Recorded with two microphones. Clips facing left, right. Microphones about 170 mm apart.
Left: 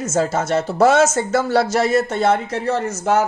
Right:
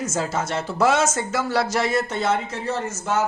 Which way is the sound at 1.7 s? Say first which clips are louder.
Left 5 dB; 45° left (ahead or behind).